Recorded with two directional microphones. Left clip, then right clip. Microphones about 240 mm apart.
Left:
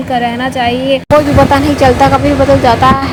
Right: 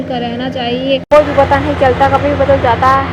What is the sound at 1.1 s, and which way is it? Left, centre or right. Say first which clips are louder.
Speech: even; left.